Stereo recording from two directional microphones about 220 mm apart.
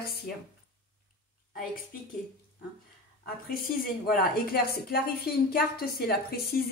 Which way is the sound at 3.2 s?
40° left (ahead or behind).